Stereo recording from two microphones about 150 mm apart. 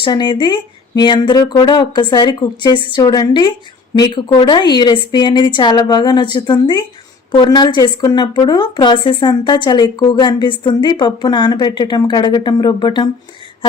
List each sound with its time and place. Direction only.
0.0 s a woman's voice: 30° left (ahead or behind)